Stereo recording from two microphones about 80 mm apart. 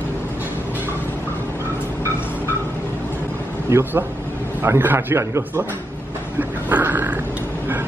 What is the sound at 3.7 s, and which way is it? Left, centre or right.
A man's voice, right.